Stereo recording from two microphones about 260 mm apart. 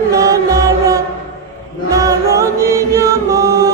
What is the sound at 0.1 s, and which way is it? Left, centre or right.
Music, centre.